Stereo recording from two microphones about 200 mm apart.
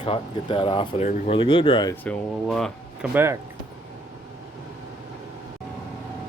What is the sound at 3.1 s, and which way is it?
Speech, 10° right (ahead or behind).